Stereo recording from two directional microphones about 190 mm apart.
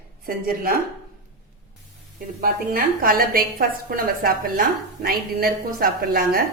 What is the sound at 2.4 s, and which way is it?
A woman's voice, 50° right (ahead or behind).